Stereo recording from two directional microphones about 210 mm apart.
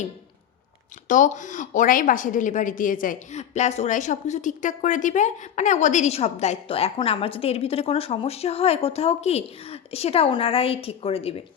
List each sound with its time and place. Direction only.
1.0 s a woman's voice: 40° left (ahead or behind)